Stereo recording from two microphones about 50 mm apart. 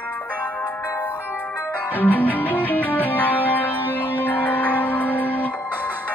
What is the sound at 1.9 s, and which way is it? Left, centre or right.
Music, left.